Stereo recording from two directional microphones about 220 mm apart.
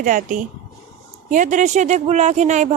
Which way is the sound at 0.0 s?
35° right (ahead or behind).